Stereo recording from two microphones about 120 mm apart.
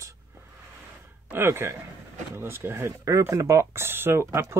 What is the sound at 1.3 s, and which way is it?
Speech, 20° right (ahead or behind).